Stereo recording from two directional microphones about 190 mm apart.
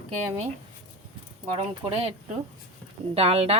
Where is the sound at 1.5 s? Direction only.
30° right (ahead or behind).